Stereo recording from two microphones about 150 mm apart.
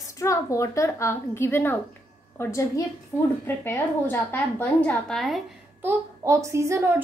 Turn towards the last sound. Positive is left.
turn(degrees=-20)  # may be behind; listen again after turning